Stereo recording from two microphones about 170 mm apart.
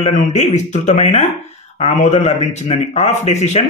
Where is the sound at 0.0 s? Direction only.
40° left (ahead or behind).